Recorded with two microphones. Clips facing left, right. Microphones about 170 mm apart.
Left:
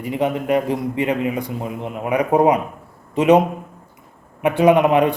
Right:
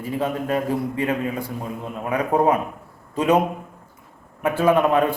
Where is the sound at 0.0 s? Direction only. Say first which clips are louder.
Left 3 dB; 20° left (ahead or behind).